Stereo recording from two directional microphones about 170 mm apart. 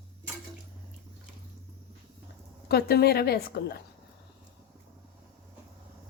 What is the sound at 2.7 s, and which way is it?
A woman's voice, 70° left (ahead or behind).